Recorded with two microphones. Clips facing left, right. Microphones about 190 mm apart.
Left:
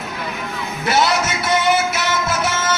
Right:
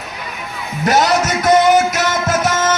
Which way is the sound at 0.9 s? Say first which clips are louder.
Right 4 dB; 40° right (ahead or behind).